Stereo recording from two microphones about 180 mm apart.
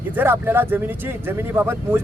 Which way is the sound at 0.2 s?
10° right (ahead or behind).